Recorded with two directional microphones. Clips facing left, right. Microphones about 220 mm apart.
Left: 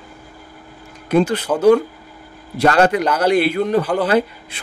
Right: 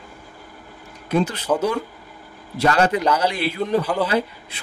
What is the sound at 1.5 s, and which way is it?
Speech, centre (ahead or behind).